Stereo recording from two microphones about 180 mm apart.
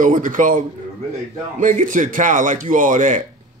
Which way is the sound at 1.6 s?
45° right (ahead or behind).